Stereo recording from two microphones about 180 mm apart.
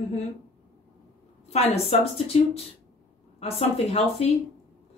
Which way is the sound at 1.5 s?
35° left (ahead or behind).